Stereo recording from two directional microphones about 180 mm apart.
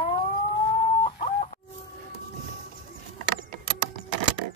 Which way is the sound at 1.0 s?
35° left (ahead or behind).